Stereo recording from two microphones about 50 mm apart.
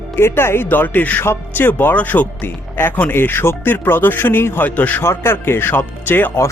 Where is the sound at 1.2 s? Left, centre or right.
Left.